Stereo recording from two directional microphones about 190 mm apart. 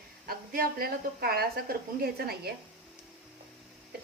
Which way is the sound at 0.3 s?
50° right (ahead or behind).